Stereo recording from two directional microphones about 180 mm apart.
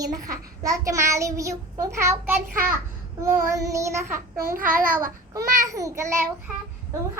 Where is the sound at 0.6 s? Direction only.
20° right (ahead or behind).